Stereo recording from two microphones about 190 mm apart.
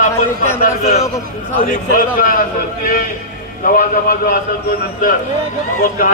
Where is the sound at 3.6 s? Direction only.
45° left (ahead or behind).